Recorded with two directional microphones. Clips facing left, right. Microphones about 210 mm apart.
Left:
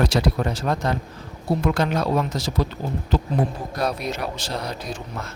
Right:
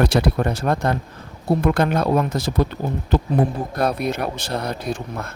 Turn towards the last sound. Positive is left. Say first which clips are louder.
# right 5 dB
turn(degrees=-55)  # may be behind; listen again after turning